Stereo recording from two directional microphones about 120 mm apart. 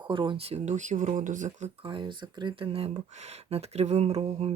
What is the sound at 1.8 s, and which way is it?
Speech, 40° right (ahead or behind).